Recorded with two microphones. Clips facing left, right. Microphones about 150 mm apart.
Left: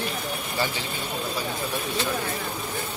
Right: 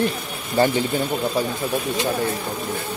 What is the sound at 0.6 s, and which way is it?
Speech, 50° right (ahead or behind).